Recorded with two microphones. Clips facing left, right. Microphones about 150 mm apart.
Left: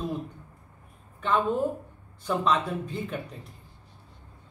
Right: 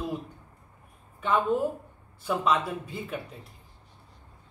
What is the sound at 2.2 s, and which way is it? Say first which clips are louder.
Speech: even; 5° right (ahead or behind).